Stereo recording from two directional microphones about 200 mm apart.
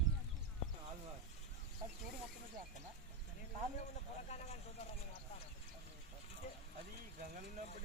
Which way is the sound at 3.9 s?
35° left (ahead or behind).